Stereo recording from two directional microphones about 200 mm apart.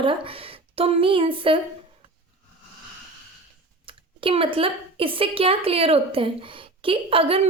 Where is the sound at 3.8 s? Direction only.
25° right (ahead or behind).